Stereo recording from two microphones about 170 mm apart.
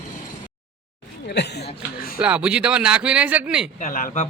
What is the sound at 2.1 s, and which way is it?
Speech, 5° right (ahead or behind).